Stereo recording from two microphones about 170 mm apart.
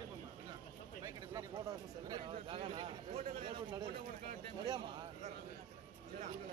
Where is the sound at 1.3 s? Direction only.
20° right (ahead or behind).